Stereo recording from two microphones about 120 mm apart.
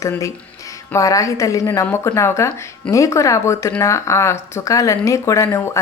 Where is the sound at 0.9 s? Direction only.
25° left (ahead or behind).